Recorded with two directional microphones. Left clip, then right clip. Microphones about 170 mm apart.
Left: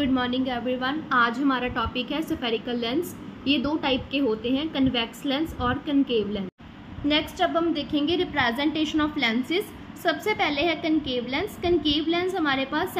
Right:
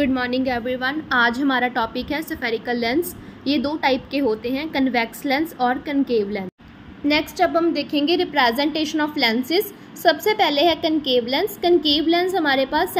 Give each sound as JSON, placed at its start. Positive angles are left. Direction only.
{"t": 0.0, "sound": "a woman's voice", "side_deg": -35}